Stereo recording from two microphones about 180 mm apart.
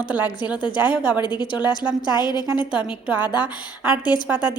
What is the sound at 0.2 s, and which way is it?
A woman's voice, 25° left (ahead or behind).